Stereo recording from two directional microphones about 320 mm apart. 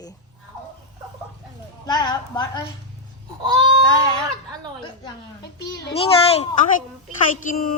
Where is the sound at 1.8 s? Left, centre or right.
Centre.